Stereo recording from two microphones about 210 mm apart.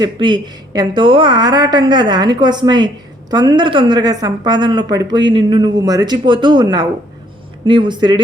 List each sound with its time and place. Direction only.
0.0 s a woman's voice: 25° right (ahead or behind)